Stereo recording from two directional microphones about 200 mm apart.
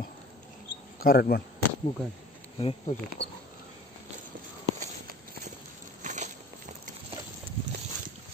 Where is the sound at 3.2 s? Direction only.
60° left (ahead or behind).